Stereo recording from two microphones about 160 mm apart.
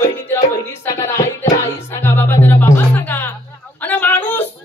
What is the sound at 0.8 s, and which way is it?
Music, 20° left (ahead or behind).